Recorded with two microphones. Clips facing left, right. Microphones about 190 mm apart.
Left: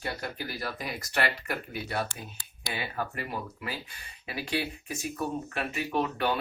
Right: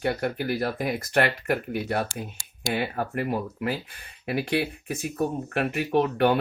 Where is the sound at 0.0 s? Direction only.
60° right (ahead or behind).